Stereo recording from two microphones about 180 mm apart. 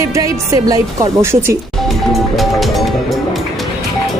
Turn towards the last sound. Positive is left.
turn(degrees=0)  # may be behind; listen again after turning